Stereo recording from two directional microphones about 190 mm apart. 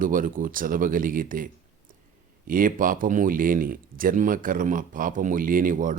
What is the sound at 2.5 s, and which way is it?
Speech, 45° right (ahead or behind).